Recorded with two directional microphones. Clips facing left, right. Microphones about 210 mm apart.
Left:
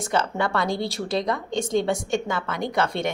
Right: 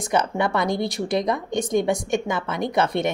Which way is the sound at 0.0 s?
20° right (ahead or behind).